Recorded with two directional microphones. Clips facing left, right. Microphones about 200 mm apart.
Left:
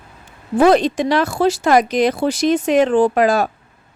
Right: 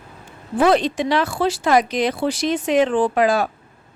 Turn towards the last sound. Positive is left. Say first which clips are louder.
# left 3 dB
turn(degrees=45)  # may be behind; listen again after turning